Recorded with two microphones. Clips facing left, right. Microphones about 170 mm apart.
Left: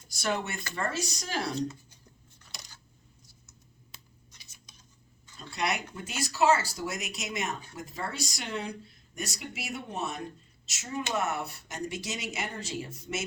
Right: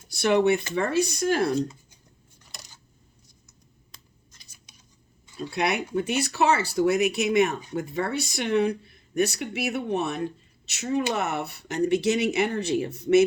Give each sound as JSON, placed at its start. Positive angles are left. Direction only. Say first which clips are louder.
{"t": 0.1, "sound": "speech", "louder": "right 12 dB", "side_deg": -65}
{"t": 3.9, "sound": "a sound", "louder": "left 1 dB", "side_deg": 5}
{"t": 5.4, "sound": "speech", "louder": "right 6 dB", "side_deg": -60}